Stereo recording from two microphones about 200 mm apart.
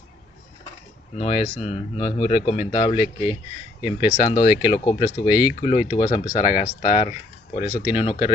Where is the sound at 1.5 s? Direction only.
30° left (ahead or behind).